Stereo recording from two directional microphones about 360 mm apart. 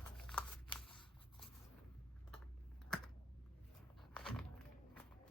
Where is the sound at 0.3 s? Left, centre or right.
Centre.